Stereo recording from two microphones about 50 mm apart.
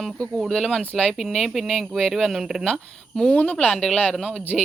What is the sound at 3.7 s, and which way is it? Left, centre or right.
Speech, centre.